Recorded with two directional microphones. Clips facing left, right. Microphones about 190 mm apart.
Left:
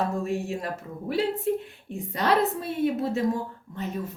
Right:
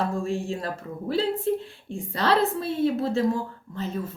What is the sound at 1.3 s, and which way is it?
Speech, 30° right (ahead or behind).